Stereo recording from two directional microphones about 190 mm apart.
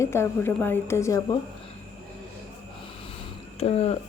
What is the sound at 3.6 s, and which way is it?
Speech, 30° left (ahead or behind).